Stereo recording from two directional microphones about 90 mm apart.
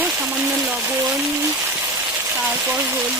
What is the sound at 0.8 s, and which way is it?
Speech, 30° right (ahead or behind).